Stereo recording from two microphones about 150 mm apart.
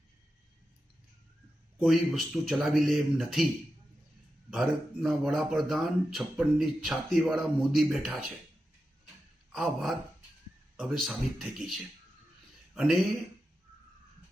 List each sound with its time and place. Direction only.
1.8 s speech: centre (ahead or behind)
4.5 s speech: centre (ahead or behind)
9.5 s a man's voice: centre (ahead or behind)